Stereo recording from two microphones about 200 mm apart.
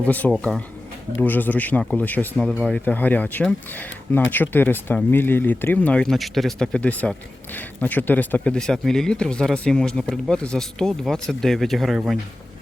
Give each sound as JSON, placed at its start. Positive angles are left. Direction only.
{"t": 0.0, "sound": "speech", "side_deg": 5}